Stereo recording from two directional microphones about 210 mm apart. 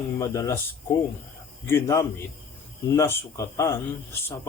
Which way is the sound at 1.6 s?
15° left (ahead or behind).